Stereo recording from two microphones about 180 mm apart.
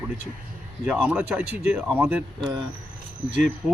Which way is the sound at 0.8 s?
10° right (ahead or behind).